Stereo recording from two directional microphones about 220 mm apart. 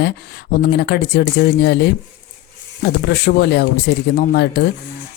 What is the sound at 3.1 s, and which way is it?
Speech, 50° left (ahead or behind).